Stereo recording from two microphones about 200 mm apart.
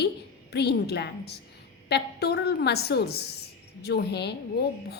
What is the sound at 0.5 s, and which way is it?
A woman's voice, 55° left (ahead or behind).